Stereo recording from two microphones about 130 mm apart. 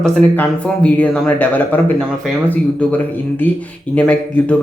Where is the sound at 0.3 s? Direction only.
10° left (ahead or behind).